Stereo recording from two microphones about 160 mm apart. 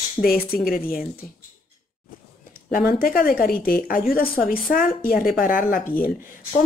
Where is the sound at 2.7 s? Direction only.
70° left (ahead or behind).